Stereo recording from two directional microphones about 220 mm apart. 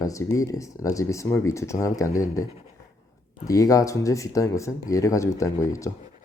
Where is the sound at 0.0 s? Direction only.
15° left (ahead or behind).